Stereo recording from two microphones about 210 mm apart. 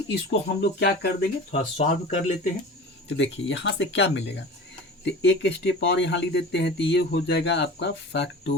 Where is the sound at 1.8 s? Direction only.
30° left (ahead or behind).